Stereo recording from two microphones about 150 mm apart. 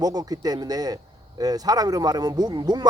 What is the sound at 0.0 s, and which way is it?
Speech, 25° right (ahead or behind).